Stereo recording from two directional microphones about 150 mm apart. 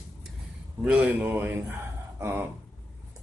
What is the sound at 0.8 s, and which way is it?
Speech, 10° right (ahead or behind).